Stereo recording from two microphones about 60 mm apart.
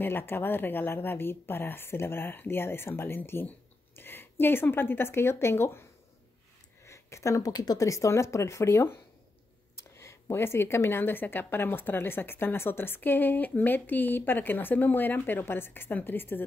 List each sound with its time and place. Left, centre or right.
0.0 s a woman's voice: left
6.8 s speech: left
9.9 s a woman's voice: left